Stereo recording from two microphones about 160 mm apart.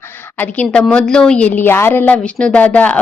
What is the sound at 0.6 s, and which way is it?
A woman's voice, 5° left (ahead or behind).